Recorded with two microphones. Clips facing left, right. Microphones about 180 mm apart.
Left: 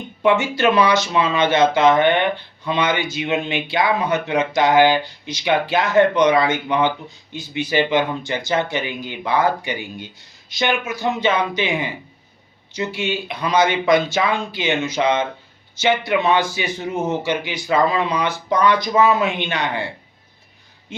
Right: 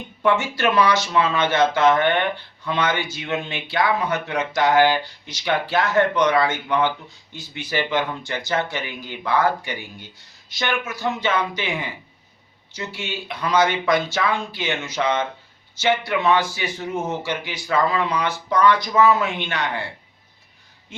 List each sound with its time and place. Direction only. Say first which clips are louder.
0.2 s speech: left 3 dB; 20° left (ahead or behind)